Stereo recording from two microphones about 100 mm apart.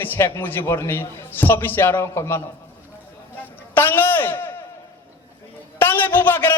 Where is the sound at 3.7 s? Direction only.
20° left (ahead or behind).